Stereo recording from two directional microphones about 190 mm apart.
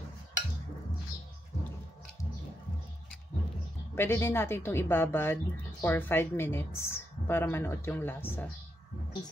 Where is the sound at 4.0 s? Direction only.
10° left (ahead or behind).